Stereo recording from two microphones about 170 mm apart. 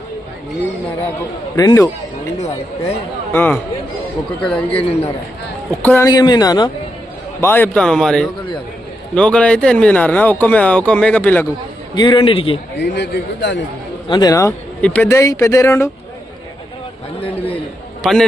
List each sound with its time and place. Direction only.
1.5 s speech: 20° left (ahead or behind)
3.3 s speech: 10° left (ahead or behind)
4.8 s a man's voice: 35° left (ahead or behind)
5.8 s speech: 10° left (ahead or behind)
6.1 s speech: 25° left (ahead or behind)
7.4 s a man's voice: 10° left (ahead or behind)
11.9 s a man's voice: 30° left (ahead or behind)
12.8 s a man's voice: 80° left
14.1 s speech: 20° left (ahead or behind)
14.8 s speech: 5° left (ahead or behind)
18.0 s a man's voice: centre (ahead or behind)